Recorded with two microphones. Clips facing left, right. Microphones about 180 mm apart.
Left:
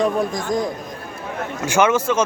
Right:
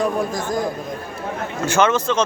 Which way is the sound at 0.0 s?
5° right (ahead or behind).